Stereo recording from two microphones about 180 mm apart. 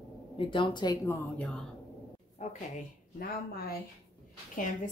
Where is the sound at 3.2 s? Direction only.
55° left (ahead or behind).